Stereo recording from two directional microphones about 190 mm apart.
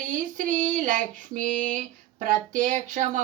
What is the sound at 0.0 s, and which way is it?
Female singing, 45° right (ahead or behind).